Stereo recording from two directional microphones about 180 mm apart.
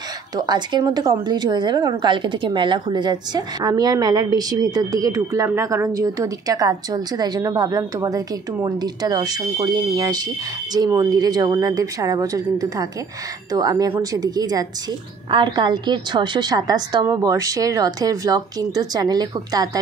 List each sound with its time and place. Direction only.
0.4 s a woman's voice: 25° right (ahead or behind)